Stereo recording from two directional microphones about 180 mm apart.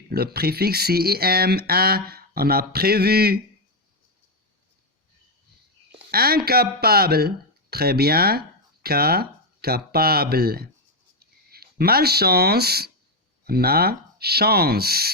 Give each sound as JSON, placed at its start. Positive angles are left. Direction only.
{"t": 0.1, "sound": "speech", "side_deg": -60}
{"t": 6.1, "sound": "speech", "side_deg": -55}